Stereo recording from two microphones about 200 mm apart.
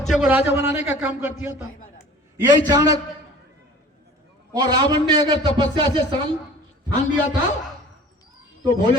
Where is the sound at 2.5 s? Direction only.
20° right (ahead or behind).